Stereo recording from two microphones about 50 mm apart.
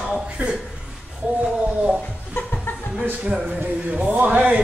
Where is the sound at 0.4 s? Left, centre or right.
Right.